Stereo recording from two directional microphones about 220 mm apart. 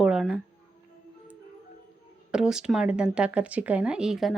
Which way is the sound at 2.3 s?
5° right (ahead or behind).